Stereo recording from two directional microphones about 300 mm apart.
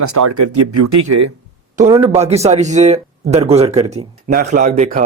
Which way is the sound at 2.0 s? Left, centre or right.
Right.